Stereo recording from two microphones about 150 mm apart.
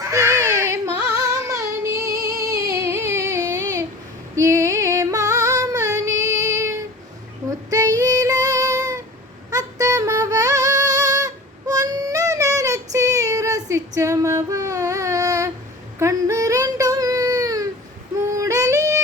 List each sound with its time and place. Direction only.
0.1 s music: 20° right (ahead or behind)
7.7 s child singing: 20° right (ahead or behind)
9.5 s a sound: 25° right (ahead or behind)
18.3 s yodeling: 20° right (ahead or behind)